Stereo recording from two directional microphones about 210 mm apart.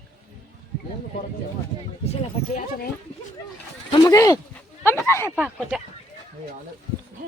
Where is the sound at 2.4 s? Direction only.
30° left (ahead or behind).